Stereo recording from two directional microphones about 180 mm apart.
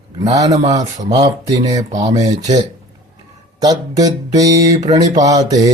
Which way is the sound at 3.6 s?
20° right (ahead or behind).